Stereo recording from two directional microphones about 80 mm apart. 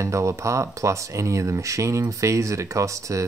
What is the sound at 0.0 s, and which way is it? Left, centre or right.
Speech, right.